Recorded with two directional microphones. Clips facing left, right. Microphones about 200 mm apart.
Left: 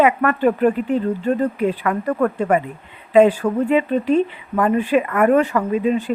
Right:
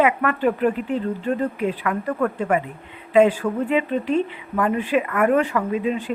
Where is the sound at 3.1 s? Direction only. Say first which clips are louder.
Left 3 dB; 35° left (ahead or behind).